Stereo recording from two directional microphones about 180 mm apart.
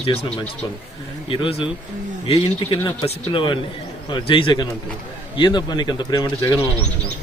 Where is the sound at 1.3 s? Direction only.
30° left (ahead or behind).